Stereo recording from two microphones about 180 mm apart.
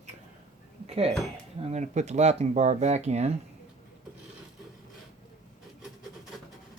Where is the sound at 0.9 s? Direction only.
35° right (ahead or behind).